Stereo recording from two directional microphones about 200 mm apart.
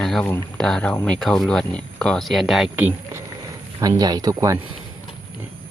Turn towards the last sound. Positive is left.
turn(degrees=-15)  # may be behind; listen again after turning